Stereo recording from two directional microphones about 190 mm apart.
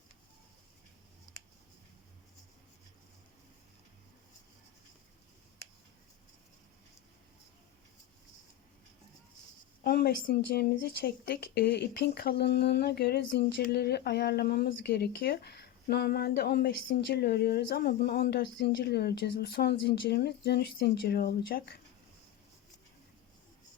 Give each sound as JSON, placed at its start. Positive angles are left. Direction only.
{"t": 9.8, "sound": "speech", "side_deg": 55}